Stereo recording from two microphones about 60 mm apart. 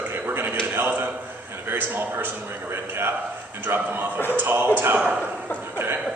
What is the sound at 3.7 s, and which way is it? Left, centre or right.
Speech, right.